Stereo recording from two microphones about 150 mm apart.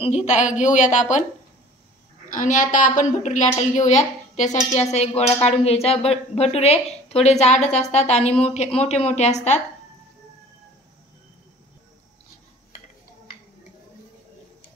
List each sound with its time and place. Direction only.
0.0 s speech: 50° left (ahead or behind)
2.3 s speech: 60° left (ahead or behind)